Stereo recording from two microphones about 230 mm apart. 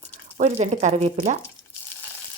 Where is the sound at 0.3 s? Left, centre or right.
Right.